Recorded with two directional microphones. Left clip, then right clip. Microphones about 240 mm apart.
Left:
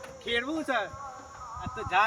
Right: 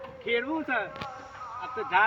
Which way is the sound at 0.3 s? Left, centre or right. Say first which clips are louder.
Right 1 dB; left.